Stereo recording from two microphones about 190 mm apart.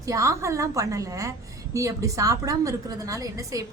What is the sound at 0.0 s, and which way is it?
A woman's voice, 15° right (ahead or behind).